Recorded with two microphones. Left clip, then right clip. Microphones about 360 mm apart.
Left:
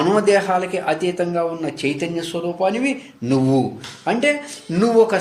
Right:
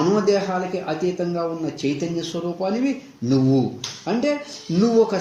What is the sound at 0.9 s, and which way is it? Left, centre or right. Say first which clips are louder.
Speech: left 4 dB; left.